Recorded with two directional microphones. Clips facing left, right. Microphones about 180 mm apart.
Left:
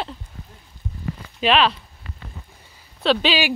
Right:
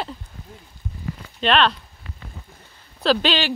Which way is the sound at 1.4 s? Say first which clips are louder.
Left 1 dB; 5° left (ahead or behind).